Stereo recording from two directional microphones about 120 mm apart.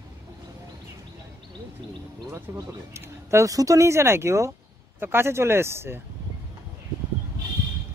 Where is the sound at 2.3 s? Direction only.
25° right (ahead or behind).